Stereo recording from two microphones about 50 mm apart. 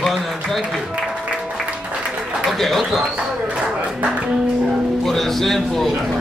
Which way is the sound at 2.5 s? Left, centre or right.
Centre.